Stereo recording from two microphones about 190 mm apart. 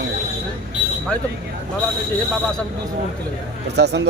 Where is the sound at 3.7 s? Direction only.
65° right (ahead or behind).